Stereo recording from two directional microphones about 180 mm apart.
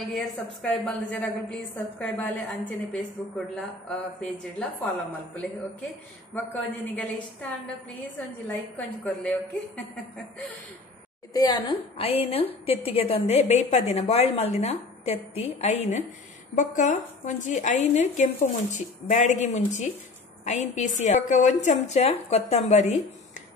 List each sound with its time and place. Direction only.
0.1 s a woman's voice: 5° left (ahead or behind)
6.3 s a woman's voice: 10° left (ahead or behind)
11.3 s a woman's voice: 20° left (ahead or behind); by 23.0 s 40° left (ahead or behind)